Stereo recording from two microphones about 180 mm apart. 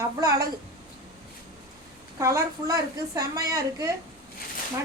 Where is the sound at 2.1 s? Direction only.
15° right (ahead or behind).